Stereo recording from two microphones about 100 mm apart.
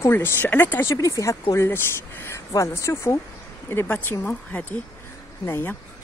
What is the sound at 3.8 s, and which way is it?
Speech, 20° left (ahead or behind).